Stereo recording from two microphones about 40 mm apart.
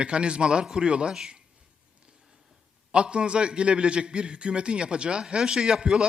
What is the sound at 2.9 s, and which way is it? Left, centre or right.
A man's voice, right.